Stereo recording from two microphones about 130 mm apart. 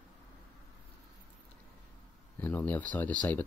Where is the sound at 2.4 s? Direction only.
15° left (ahead or behind).